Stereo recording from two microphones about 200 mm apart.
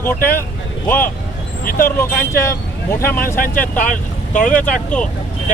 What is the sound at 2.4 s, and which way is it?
Speech, 15° left (ahead or behind).